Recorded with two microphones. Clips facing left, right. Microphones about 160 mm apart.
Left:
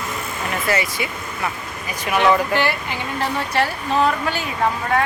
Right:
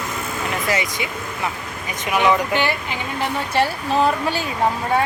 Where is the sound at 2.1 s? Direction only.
15° right (ahead or behind).